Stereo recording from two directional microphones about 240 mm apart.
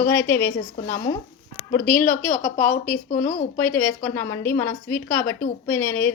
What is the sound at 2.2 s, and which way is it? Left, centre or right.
Speech, left.